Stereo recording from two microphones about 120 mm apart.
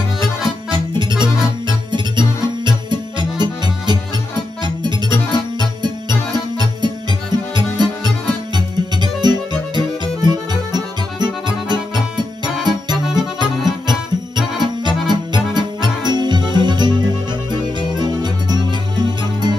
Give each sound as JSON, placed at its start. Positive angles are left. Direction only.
{"t": 0.9, "sound": "music", "side_deg": -40}